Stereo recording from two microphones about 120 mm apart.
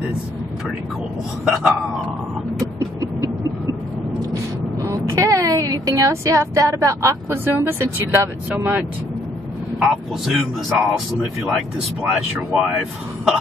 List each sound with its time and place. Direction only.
1.4 s a man's voice: 5° right (ahead or behind)
4.8 s speech: 25° right (ahead or behind)
9.8 s a man's voice: 5° right (ahead or behind)